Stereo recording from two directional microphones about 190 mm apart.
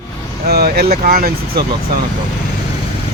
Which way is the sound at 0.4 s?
55° right (ahead or behind).